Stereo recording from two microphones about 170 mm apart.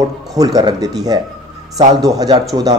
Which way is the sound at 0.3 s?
20° right (ahead or behind).